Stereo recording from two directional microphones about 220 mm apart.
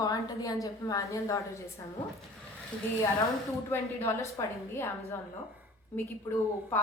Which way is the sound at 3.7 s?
10° left (ahead or behind).